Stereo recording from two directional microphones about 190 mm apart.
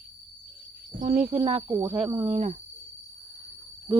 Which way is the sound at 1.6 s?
20° right (ahead or behind).